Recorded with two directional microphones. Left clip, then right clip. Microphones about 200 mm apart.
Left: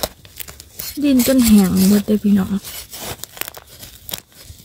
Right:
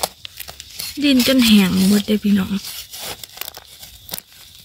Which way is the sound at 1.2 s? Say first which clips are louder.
Even; 30° left (ahead or behind).